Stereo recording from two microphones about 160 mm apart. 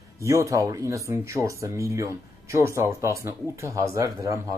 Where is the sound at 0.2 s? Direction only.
20° right (ahead or behind).